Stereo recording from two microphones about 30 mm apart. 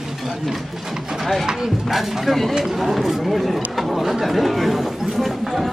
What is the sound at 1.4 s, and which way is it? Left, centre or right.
Chopping, centre.